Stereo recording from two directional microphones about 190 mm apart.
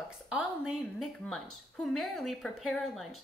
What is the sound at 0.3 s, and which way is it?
A woman's voice, 5° right (ahead or behind).